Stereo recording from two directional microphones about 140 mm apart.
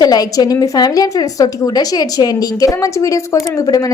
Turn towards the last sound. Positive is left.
turn(degrees=25)  # may be behind; listen again after turning